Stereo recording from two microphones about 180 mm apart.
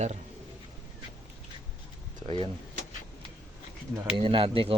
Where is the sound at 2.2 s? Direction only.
30° right (ahead or behind).